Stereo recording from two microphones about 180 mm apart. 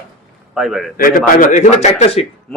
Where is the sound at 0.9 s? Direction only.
50° left (ahead or behind).